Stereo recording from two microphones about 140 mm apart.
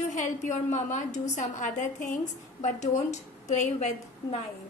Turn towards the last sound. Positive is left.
turn(degrees=55)  # may be behind; listen again after turning